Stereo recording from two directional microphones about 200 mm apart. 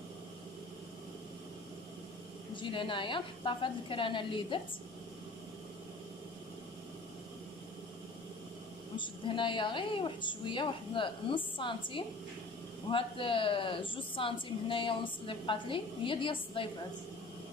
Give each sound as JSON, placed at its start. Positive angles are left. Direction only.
{"t": 2.5, "sound": "a woman's voice", "side_deg": 25}
{"t": 8.9, "sound": "a woman's voice", "side_deg": 25}